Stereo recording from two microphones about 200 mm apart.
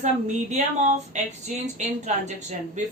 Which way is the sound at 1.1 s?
35° right (ahead or behind).